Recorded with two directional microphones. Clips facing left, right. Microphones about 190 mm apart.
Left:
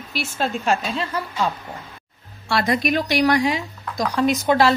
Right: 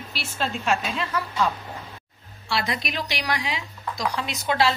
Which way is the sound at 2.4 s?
45° left (ahead or behind).